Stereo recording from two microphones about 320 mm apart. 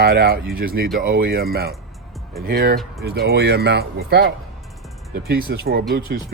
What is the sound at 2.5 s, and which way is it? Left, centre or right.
Speech, right.